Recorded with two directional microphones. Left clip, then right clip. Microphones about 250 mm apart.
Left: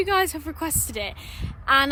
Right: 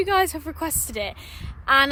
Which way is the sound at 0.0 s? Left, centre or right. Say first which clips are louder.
Right 1 dB; centre.